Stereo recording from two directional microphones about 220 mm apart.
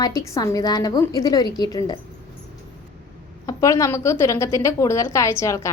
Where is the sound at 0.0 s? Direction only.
15° left (ahead or behind).